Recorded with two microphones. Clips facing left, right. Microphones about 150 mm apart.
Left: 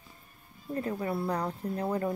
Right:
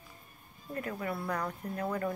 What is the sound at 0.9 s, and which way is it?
Speech, 25° left (ahead or behind).